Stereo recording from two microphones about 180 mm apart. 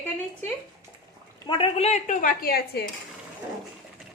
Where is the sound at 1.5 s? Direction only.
30° left (ahead or behind); by 2.8 s 55° left (ahead or behind).